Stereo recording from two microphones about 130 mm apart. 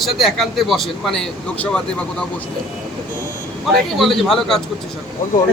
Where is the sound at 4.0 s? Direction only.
Centre (ahead or behind).